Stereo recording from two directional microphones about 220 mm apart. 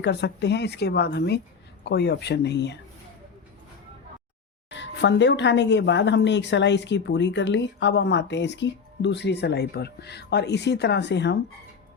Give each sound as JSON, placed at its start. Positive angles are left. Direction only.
{"t": 0.0, "sound": "speech", "side_deg": 50}
{"t": 4.7, "sound": "speech", "side_deg": 55}